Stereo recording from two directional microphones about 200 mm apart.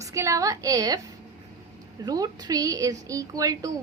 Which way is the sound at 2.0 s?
20° right (ahead or behind).